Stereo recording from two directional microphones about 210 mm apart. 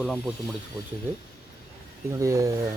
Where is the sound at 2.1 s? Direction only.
15° right (ahead or behind).